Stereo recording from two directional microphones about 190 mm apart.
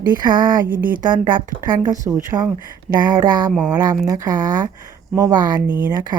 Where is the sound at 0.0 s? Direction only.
20° right (ahead or behind).